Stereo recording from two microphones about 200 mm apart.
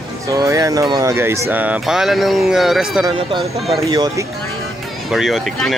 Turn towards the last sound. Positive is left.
turn(degrees=0)  # may be behind; listen again after turning